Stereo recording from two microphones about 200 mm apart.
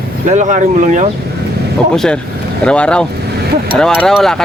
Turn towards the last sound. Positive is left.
turn(degrees=0)  # may be behind; listen again after turning